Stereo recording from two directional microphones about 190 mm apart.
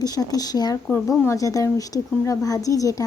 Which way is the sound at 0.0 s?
20° left (ahead or behind).